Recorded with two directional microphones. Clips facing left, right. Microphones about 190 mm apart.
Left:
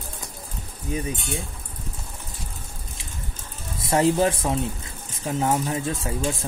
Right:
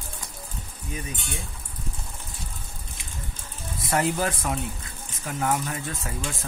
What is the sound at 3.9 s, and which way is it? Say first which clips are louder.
Speech: left 5 dB; 25° left (ahead or behind).